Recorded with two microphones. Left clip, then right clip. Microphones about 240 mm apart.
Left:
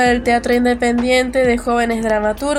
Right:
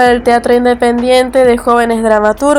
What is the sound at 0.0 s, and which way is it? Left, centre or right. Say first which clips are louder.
A woman's voice: right 6 dB; centre.